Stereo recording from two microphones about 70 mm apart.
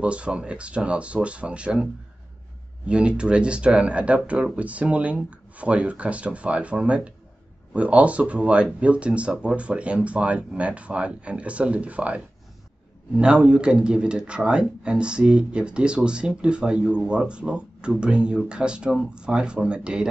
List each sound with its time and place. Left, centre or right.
0.0 s speech: centre
2.9 s speech: centre